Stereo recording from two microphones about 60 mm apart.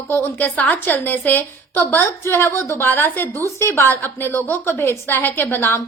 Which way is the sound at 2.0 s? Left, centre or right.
Left.